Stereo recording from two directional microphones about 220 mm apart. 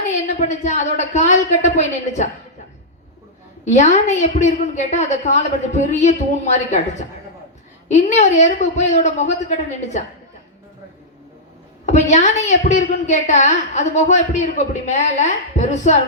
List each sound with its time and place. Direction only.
0.1 s a woman's voice: 35° left (ahead or behind)
3.6 s a woman's voice: 30° left (ahead or behind)
11.9 s a woman's voice: 30° left (ahead or behind)